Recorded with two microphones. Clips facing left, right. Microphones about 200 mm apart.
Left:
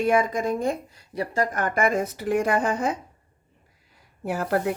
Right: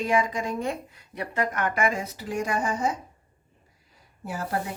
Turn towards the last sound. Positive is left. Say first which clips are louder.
# left 6 dB
turn(degrees=60)  # may be behind; listen again after turning